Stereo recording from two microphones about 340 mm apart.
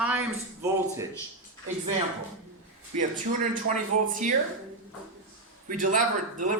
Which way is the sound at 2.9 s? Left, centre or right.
Right.